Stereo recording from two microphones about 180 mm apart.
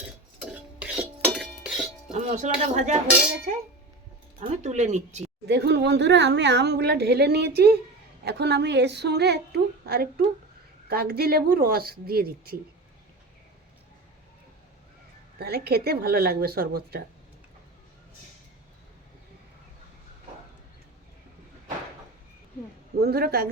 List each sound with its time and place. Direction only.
0.8 s dishes: 10° right (ahead or behind)
2.1 s speech: 40° right (ahead or behind)
4.4 s speech: 40° right (ahead or behind)
5.5 s speech: 70° right (ahead or behind)
15.4 s speech: 60° right (ahead or behind)
23.0 s speech: 60° right (ahead or behind)